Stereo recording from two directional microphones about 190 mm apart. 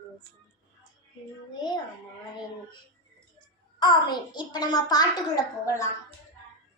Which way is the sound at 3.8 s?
20° left (ahead or behind).